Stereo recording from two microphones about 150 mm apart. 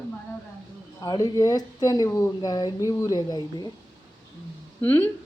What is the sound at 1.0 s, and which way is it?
Speech, 25° left (ahead or behind).